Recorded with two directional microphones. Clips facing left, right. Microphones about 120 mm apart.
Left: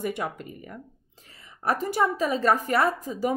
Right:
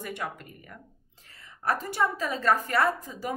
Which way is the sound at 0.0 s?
20° left (ahead or behind).